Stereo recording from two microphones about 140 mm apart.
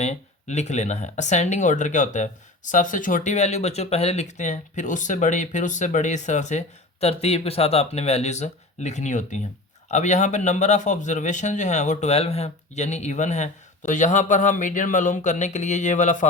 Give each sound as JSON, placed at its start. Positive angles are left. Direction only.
{"t": 0.0, "sound": "speech", "side_deg": 55}